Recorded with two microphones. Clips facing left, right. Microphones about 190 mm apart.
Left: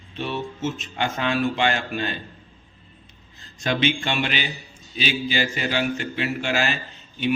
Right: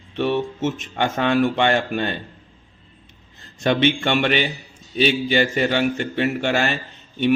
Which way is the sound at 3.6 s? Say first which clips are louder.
Right 5 dB; 60° right (ahead or behind).